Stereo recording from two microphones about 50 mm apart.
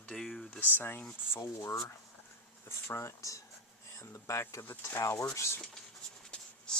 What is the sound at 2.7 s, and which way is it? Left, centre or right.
Speech, left.